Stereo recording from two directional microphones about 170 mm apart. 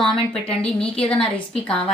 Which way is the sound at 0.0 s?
5° left (ahead or behind).